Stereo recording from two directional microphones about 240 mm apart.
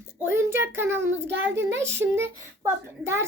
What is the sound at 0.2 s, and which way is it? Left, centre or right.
A woman's voice, centre.